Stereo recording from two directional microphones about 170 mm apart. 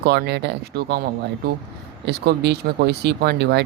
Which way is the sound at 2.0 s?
70° right (ahead or behind).